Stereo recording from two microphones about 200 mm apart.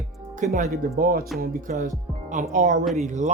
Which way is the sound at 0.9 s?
50° right (ahead or behind).